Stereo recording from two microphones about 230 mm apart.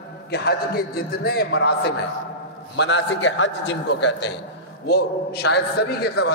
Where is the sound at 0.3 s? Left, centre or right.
Left.